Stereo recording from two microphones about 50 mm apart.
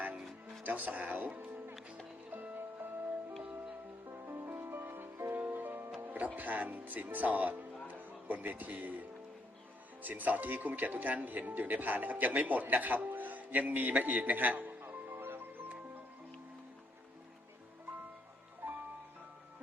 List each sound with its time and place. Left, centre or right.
0.6 s speech: right
2.3 s music: right
3.4 s music: right
4.1 s music: right
6.1 s speech: right
18.6 s music: right